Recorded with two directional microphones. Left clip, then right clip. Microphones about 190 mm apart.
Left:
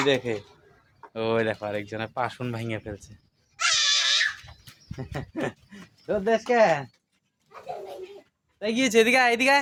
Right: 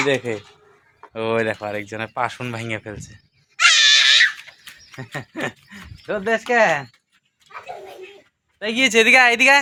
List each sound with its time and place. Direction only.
0.0 s speech: 45° right (ahead or behind)
1.0 s speech: 35° right (ahead or behind)
3.6 s a sound: 15° left (ahead or behind)
4.9 s speech: 10° right (ahead or behind)
8.5 s speech: 10° right (ahead or behind)